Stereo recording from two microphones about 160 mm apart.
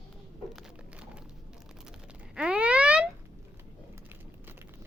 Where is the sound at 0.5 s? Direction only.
5° right (ahead or behind).